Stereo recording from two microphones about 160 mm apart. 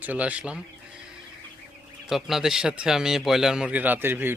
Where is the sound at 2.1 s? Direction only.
Centre (ahead or behind).